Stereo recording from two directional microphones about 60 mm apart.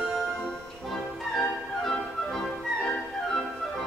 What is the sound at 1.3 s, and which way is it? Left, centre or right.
Music, centre.